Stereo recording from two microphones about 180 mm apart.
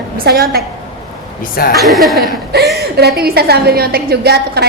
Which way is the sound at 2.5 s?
65° right (ahead or behind).